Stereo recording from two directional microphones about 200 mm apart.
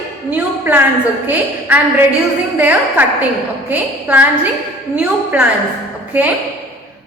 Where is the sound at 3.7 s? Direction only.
10° right (ahead or behind).